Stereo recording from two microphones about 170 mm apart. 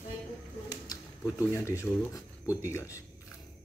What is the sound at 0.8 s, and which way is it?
Speech, 20° left (ahead or behind).